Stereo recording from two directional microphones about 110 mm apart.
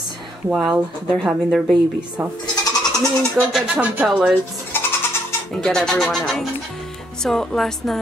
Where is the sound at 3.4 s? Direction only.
10° right (ahead or behind).